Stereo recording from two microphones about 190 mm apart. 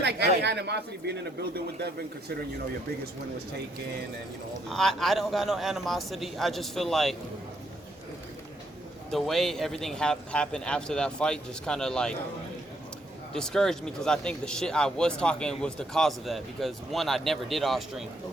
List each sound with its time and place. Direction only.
0.0 s a man's voice: 60° right (ahead or behind)
4.7 s speech: centre (ahead or behind)
9.1 s speech: centre (ahead or behind)
13.3 s speech: 5° left (ahead or behind)